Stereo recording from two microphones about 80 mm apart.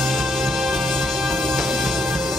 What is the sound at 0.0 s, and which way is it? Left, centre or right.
Music, centre.